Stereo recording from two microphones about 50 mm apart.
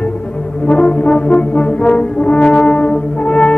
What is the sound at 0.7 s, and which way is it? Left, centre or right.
Brass instrument, left.